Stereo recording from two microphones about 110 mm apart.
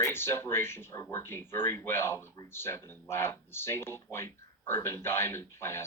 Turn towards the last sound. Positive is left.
turn(degrees=25)  # may be behind; listen again after turning